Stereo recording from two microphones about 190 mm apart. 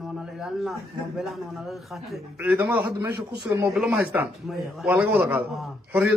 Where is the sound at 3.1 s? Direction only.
55° right (ahead or behind).